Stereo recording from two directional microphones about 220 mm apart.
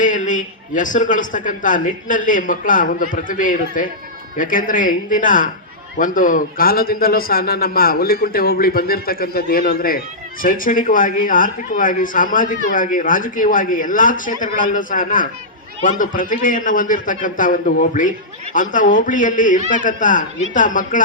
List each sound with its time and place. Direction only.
0.0 s a man's voice: 35° left (ahead or behind)